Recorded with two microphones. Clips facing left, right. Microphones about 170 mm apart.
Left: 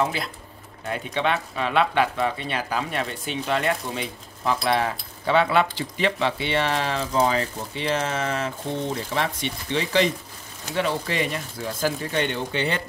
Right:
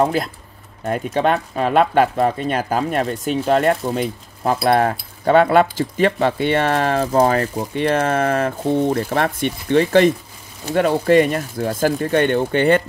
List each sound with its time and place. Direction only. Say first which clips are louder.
0.0 s speech: right 7 dB; 45° right (ahead or behind)